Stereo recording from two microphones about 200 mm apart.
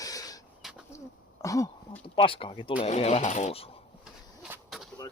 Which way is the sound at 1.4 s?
15° left (ahead or behind).